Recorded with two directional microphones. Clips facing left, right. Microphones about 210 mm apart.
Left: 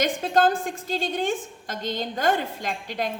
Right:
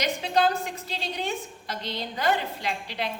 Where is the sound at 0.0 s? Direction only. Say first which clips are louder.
Left 3 dB; 50° left (ahead or behind).